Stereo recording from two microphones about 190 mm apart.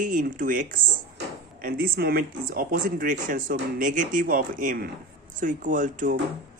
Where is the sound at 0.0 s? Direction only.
45° right (ahead or behind).